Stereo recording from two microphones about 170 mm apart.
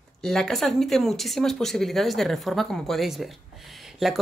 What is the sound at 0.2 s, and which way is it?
Speech, centre (ahead or behind).